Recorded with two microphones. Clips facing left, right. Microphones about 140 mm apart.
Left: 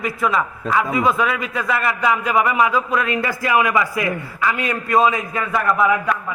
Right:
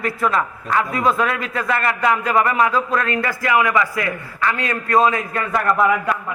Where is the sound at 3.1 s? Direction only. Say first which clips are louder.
Even; 20° left (ahead or behind).